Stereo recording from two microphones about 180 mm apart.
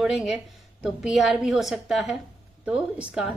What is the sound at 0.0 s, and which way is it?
A woman's voice, 5° right (ahead or behind).